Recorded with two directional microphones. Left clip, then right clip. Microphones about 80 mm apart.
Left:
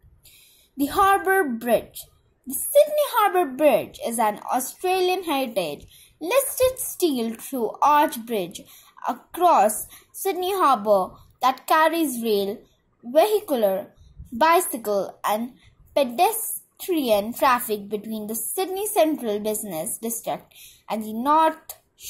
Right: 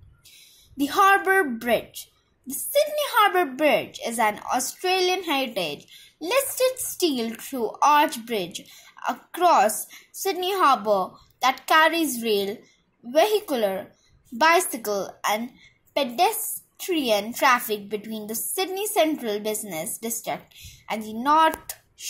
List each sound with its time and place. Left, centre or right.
0.7 s a woman's voice: left
2.0 s a sound: right
2.7 s a woman's voice: left
20.2 s a woman's voice: left
20.6 s a sound: left
21.3 s speech: left